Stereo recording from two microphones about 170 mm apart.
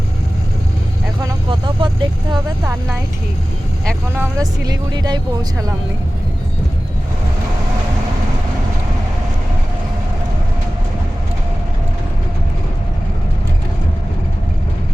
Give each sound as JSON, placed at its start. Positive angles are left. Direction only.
{"t": 1.5, "sound": "vehicle", "side_deg": -25}
{"t": 4.2, "sound": "speech", "side_deg": -20}